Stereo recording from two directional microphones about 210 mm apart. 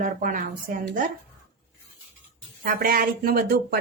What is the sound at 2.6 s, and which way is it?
Speech, 45° right (ahead or behind).